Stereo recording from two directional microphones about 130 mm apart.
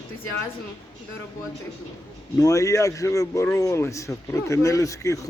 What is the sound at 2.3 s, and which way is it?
Speech, 25° left (ahead or behind).